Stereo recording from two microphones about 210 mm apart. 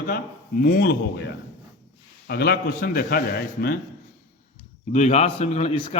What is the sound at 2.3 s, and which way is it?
A man's voice, 50° left (ahead or behind).